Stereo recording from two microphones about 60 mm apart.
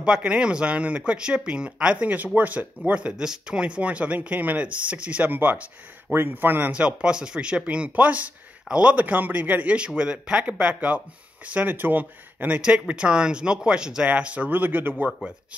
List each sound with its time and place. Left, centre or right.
0.0 s speech: centre
2.0 s speech: right
6.7 s speech: centre
14.5 s speech: right